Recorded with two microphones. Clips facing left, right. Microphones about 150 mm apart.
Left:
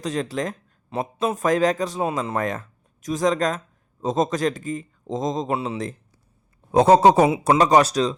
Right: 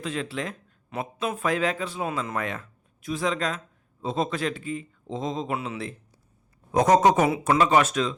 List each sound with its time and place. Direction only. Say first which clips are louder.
0.0 s a man's voice: left 5 dB; 40° left (ahead or behind)